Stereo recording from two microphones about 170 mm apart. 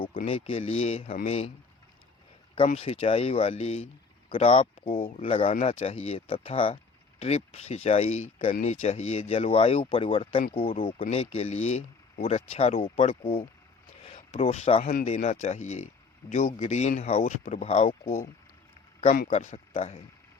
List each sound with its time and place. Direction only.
0.3 s speech: 35° left (ahead or behind)
2.7 s speech: 35° left (ahead or behind)
15.0 s speech: 40° left (ahead or behind)
19.3 s speech: 40° left (ahead or behind)